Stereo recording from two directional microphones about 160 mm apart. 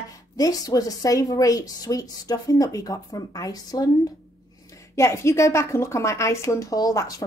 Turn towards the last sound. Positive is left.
turn(degrees=20)  # may be behind; listen again after turning